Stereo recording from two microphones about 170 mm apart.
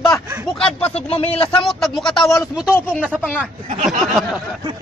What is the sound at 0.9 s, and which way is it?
Speech, 35° left (ahead or behind).